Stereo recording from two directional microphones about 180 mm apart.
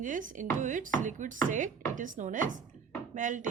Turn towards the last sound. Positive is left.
turn(degrees=-45)  # may be behind; listen again after turning